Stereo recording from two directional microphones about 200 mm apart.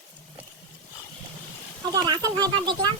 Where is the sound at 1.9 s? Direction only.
20° right (ahead or behind).